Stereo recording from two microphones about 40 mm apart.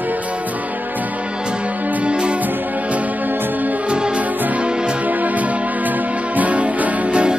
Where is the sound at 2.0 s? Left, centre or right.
Right.